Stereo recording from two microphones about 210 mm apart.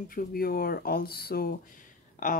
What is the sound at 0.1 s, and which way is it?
Speech, 45° left (ahead or behind).